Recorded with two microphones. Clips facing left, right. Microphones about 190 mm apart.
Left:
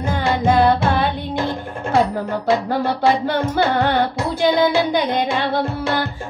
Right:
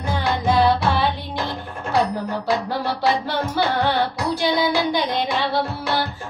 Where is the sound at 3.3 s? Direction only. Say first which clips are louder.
Left 4 dB; 50° left (ahead or behind).